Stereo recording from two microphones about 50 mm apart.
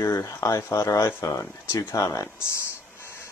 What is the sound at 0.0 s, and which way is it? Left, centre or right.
Speech, left.